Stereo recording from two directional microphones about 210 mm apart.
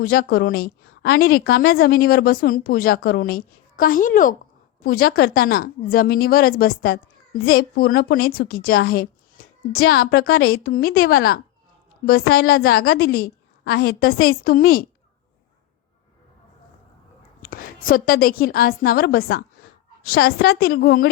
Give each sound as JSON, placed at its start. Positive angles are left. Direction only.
{"t": 0.0, "sound": "a woman's voice", "side_deg": 45}
{"t": 17.4, "sound": "a woman's voice", "side_deg": 45}